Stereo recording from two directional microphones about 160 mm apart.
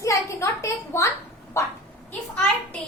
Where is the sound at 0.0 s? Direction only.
20° left (ahead or behind).